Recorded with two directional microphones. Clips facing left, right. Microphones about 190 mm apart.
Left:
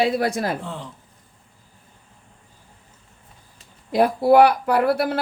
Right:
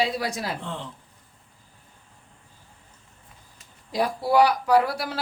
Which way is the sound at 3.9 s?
55° left (ahead or behind).